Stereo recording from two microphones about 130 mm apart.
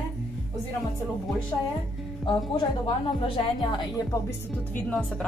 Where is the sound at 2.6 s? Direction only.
40° left (ahead or behind).